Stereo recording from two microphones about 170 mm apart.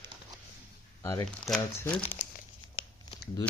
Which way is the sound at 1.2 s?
5° left (ahead or behind).